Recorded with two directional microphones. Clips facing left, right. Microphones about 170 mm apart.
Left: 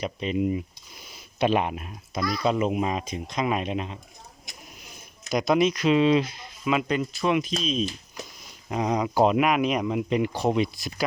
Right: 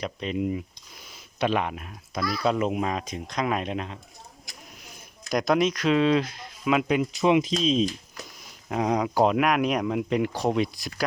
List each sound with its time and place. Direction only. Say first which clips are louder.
0.0 s speech: left 2 dB; 5° left (ahead or behind)
1.4 s speech: left 2 dB; 15° left (ahead or behind)
2.2 s speech: left 1 dB; centre (ahead or behind)
4.5 s a sound: left 1 dB; 20° left (ahead or behind)
5.3 s speech: left 1 dB; 5° left (ahead or behind); by 7.9 s 25° right (ahead or behind)
8.7 s speech: even; centre (ahead or behind)